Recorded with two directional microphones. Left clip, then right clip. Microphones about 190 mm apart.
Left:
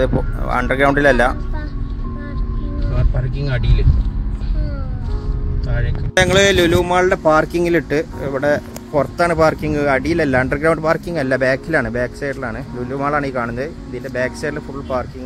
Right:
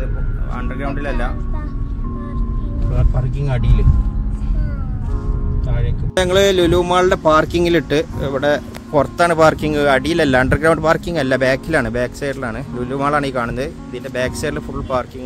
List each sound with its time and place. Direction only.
0.0 s speech: 35° left (ahead or behind)
6.1 s speech: 5° right (ahead or behind)